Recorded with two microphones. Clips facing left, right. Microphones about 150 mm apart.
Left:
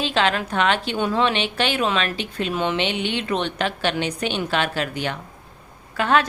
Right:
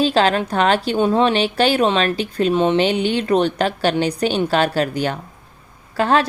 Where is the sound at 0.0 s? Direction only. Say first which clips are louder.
Right 5 dB; 40° right (ahead or behind).